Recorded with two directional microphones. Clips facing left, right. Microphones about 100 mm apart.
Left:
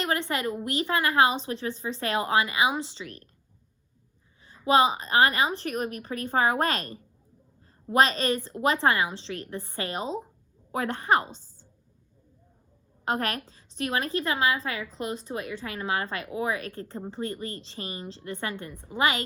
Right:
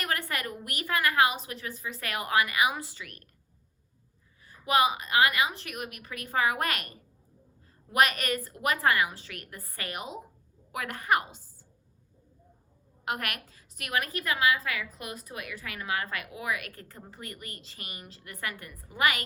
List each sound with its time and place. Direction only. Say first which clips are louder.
0.0 s a woman's voice: left 5 dB; 25° left (ahead or behind)
4.4 s a woman's voice: left 4 dB; 25° left (ahead or behind)
13.1 s a woman's voice: left 5 dB; 30° left (ahead or behind)